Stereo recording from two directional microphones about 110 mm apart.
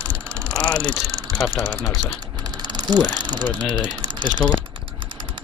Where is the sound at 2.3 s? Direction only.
40° right (ahead or behind).